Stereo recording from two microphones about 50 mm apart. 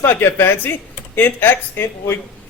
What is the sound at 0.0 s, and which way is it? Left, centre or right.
Speech, left.